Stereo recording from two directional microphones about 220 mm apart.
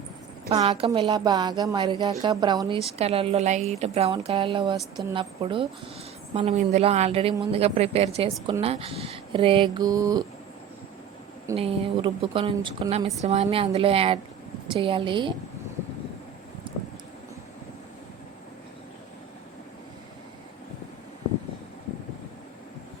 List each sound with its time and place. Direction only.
0.7 s a woman's voice: 20° right (ahead or behind)
11.5 s speech: 25° right (ahead or behind)
16.7 s a sound: 20° right (ahead or behind)